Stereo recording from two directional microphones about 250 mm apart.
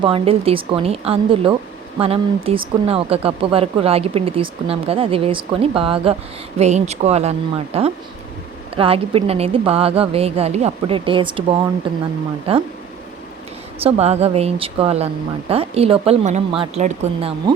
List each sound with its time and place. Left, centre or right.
0.0 s speech: right
13.8 s speech: right